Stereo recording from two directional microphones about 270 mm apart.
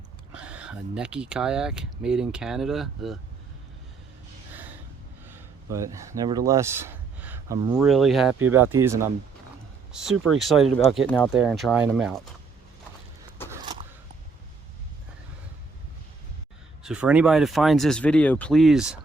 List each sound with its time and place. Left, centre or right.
0.3 s speech: centre
5.2 s speech: centre
10.7 s speech: left
10.9 s speech: centre
13.5 s a sound: centre
16.8 s speech: centre